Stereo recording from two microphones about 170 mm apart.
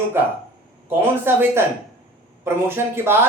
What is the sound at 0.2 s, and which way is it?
Speech, 15° right (ahead or behind).